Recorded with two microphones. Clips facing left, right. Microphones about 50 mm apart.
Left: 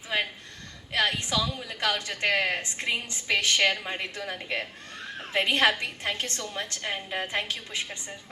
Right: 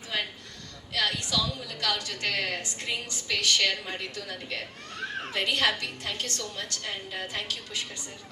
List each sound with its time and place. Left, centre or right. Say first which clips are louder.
0.9 s a woman's voice: left 2 dB; left